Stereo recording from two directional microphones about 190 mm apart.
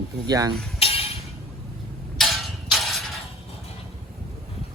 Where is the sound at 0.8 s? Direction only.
30° left (ahead or behind).